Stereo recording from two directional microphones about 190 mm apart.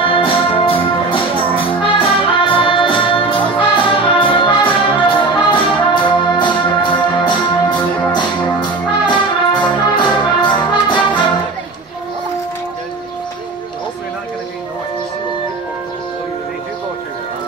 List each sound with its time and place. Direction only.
0.0 s music: 30° left (ahead or behind)